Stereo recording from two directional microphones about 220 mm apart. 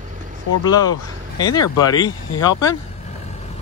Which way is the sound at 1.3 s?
20° left (ahead or behind).